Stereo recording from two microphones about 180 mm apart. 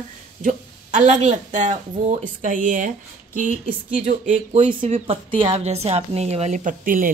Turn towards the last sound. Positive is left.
turn(degrees=-50)  # may be behind; listen again after turning